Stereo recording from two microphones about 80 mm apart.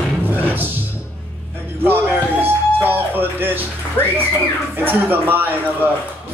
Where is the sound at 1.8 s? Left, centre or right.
Right.